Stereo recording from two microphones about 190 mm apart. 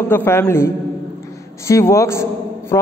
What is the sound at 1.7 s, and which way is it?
Speech, 15° left (ahead or behind).